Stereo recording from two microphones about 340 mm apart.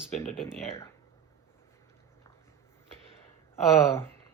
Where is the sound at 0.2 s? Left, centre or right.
Centre.